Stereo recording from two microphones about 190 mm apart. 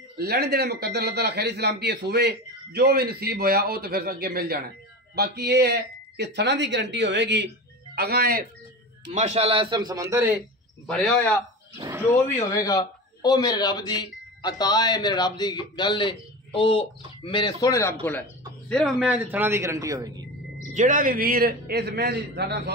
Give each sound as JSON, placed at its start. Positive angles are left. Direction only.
{"t": 0.2, "sound": "a man's voice", "side_deg": -55}
{"t": 9.1, "sound": "a man's voice", "side_deg": -35}
{"t": 10.9, "sound": "a man's voice", "side_deg": 5}
{"t": 12.4, "sound": "speech", "side_deg": 15}
{"t": 18.7, "sound": "a man's voice", "side_deg": 0}
{"t": 20.7, "sound": "a man's voice", "side_deg": -45}